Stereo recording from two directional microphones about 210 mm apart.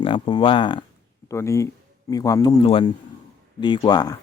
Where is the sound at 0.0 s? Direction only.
25° left (ahead or behind).